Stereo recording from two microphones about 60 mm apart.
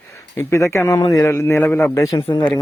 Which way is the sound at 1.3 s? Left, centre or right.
Left.